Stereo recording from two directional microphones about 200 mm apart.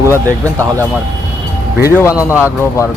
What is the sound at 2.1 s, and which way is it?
Speech, 5° right (ahead or behind).